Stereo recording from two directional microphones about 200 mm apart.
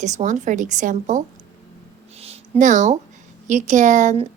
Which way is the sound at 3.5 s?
35° right (ahead or behind).